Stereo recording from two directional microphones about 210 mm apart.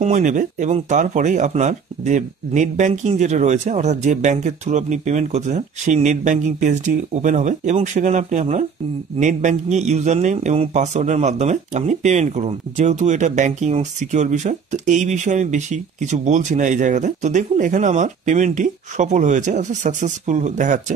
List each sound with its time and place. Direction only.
0.0 s speech: 35° right (ahead or behind)